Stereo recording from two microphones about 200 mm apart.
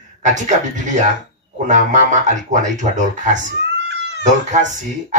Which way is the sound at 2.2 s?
40° right (ahead or behind).